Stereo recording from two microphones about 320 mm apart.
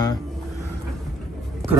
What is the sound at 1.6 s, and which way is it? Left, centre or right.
Speech, centre.